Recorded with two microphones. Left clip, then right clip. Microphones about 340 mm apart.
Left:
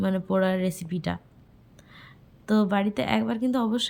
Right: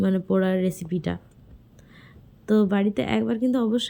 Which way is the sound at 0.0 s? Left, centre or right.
Centre.